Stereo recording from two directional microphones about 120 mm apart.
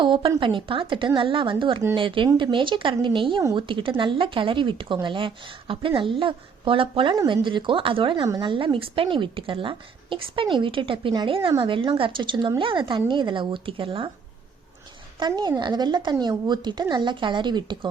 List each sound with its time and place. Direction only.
0.0 s a woman's voice: 45° right (ahead or behind)
15.4 s speech: 40° right (ahead or behind)